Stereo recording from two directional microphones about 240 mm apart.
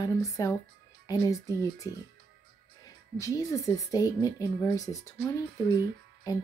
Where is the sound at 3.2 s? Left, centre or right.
Centre.